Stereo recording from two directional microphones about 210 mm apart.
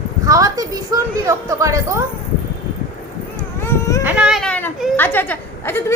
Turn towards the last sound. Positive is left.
turn(degrees=10)  # may be behind; listen again after turning